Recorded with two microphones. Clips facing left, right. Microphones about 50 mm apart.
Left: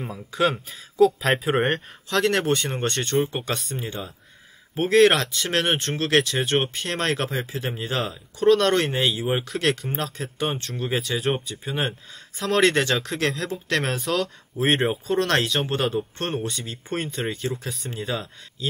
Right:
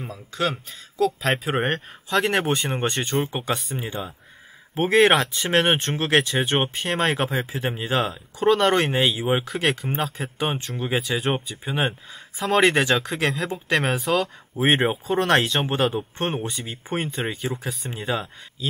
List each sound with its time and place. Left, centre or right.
0.0 s speech: centre
2.0 s speech: centre